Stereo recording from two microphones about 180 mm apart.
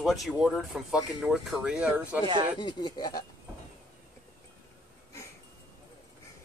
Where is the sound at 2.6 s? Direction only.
25° left (ahead or behind).